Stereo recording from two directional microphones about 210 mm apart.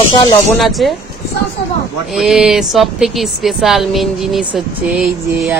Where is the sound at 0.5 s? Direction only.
Centre (ahead or behind).